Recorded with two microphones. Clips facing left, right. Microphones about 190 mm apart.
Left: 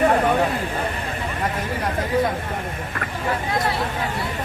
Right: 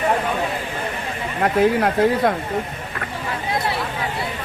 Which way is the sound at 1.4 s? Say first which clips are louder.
Right 12 dB; 70° right (ahead or behind).